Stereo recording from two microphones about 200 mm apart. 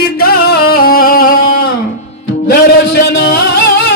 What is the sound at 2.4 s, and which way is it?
Speech, 55° left (ahead or behind).